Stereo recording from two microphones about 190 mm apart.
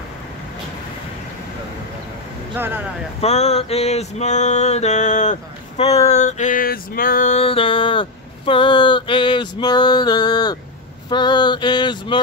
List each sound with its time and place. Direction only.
2.5 s speech: 10° right (ahead or behind)
3.2 s male singing: 35° left (ahead or behind)
6.0 s a sound: 40° left (ahead or behind)